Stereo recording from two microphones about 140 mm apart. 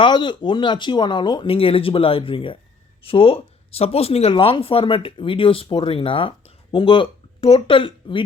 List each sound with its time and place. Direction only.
0.0 s speech: 35° left (ahead or behind)